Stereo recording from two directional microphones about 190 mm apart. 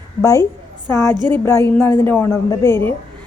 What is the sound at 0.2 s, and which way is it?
A woman's voice, 15° left (ahead or behind).